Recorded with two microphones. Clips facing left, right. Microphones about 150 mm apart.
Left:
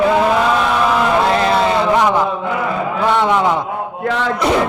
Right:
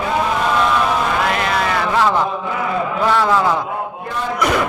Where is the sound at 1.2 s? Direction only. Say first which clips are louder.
Left 5 dB; 30° left (ahead or behind).